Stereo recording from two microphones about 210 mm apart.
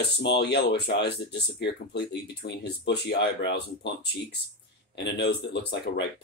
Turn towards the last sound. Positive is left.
turn(degrees=50)  # may be behind; listen again after turning